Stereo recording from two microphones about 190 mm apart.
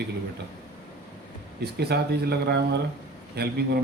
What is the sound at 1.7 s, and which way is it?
Speech, 60° right (ahead or behind).